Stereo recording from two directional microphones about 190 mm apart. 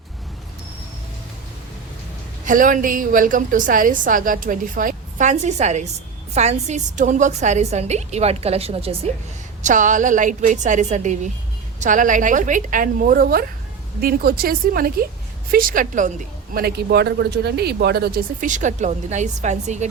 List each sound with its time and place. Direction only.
2.4 s a woman's voice: 45° right (ahead or behind)
9.6 s a woman's voice: 40° right (ahead or behind)
16.6 s a woman's voice: 55° right (ahead or behind); by 19.9 s 40° right (ahead or behind)